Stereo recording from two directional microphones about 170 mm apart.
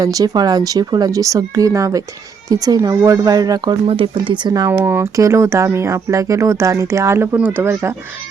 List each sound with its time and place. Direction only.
0.0 s speech: 20° right (ahead or behind)
4.8 s speech: 15° right (ahead or behind)